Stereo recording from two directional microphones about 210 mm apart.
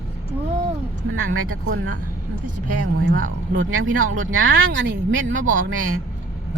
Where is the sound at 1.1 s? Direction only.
80° right.